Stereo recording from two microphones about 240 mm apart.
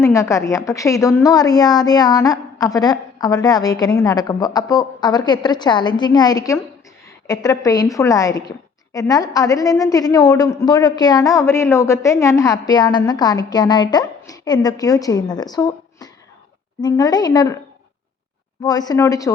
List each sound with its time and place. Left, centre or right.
0.0 s a woman's voice: centre
18.6 s a woman's voice: centre